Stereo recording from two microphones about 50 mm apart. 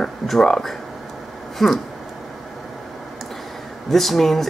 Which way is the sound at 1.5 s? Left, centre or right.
Centre.